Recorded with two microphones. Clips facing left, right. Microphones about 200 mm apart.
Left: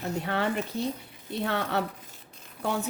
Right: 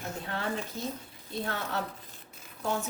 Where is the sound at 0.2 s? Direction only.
70° left (ahead or behind).